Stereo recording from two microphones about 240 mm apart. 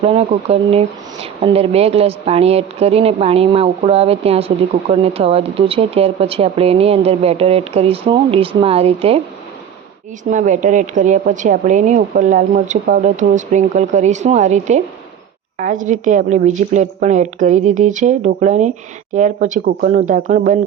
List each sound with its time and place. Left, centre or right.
0.0 s a woman's voice: right
10.2 s a woman's voice: right